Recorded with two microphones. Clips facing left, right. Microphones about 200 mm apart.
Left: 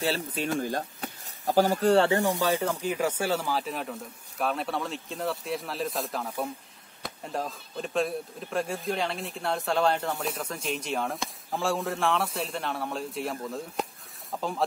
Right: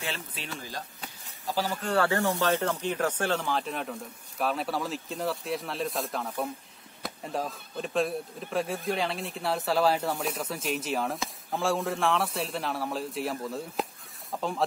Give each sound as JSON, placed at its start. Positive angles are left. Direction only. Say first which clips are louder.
{"t": 0.0, "sound": "speech", "louder": "left 8 dB", "side_deg": 40}
{"t": 2.0, "sound": "speech", "louder": "left 1 dB", "side_deg": 15}